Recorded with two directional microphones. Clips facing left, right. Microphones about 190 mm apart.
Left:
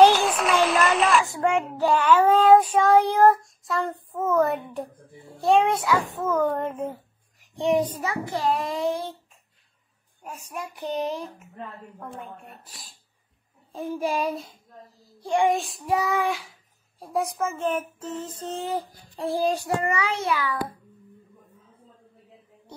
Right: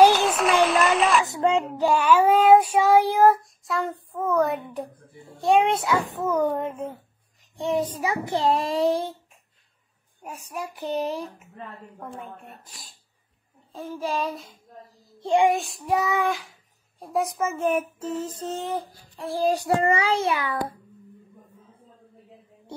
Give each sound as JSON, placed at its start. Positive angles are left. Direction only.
{"t": 0.0, "sound": "run", "side_deg": 0}
{"t": 1.2, "sound": "child singing", "side_deg": -20}
{"t": 5.6, "sound": "a child's voice", "side_deg": -25}
{"t": 6.5, "sound": "a child's voice", "side_deg": 0}
{"t": 8.0, "sound": "a child's voice", "side_deg": -20}
{"t": 10.5, "sound": "speech", "side_deg": -5}
{"t": 13.7, "sound": "a child's voice", "side_deg": 15}
{"t": 15.1, "sound": "child singing", "side_deg": -20}
{"t": 15.5, "sound": "speech", "side_deg": 0}
{"t": 19.8, "sound": "a child's voice", "side_deg": -30}